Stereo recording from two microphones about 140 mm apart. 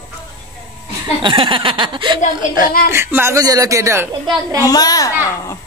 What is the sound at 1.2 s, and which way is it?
Chuckle, 35° right (ahead or behind).